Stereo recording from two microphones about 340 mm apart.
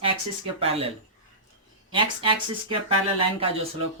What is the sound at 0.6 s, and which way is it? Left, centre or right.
Speech, centre.